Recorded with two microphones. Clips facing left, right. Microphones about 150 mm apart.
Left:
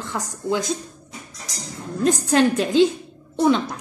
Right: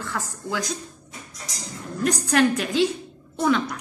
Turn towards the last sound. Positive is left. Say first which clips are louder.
# left 3 dB
turn(degrees=30)  # may be behind; listen again after turning